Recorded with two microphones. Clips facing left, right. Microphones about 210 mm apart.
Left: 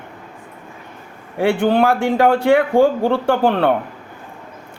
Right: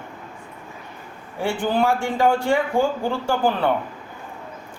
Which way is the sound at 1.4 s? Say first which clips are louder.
Left 6 dB; 60° left (ahead or behind).